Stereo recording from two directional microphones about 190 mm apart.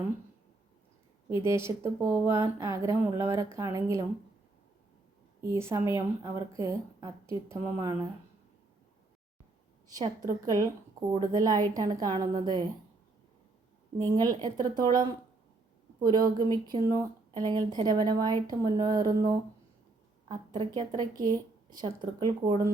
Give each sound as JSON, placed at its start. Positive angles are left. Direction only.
{"t": 1.3, "sound": "speech", "side_deg": -15}
{"t": 5.4, "sound": "speech", "side_deg": -15}
{"t": 10.4, "sound": "speech", "side_deg": -20}
{"t": 14.2, "sound": "speech", "side_deg": -20}